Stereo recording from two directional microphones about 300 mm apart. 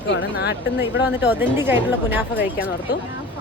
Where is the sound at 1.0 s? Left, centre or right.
Centre.